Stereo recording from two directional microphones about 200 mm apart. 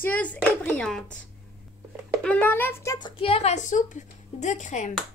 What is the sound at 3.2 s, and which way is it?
Speech, 30° left (ahead or behind).